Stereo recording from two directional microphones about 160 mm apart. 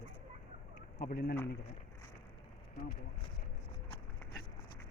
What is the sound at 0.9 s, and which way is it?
Speech, 75° left (ahead or behind).